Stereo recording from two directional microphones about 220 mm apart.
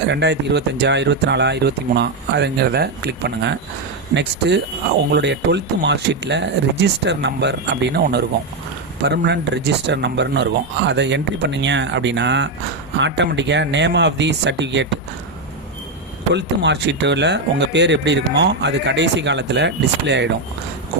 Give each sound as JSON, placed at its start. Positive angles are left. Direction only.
{"t": 0.1, "sound": "speech", "side_deg": -50}
{"t": 16.3, "sound": "speech", "side_deg": -50}